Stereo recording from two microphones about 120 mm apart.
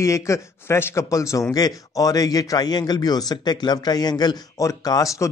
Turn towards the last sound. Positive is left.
turn(degrees=30)  # may be behind; listen again after turning